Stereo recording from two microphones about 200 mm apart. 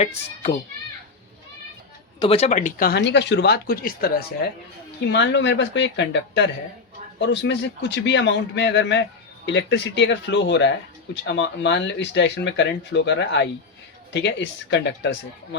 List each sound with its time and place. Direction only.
0.0 s a child's voice: 35° left (ahead or behind)
2.1 s speech: 30° left (ahead or behind); by 4.1 s 50° left (ahead or behind)
5.0 s speech: 60° left (ahead or behind)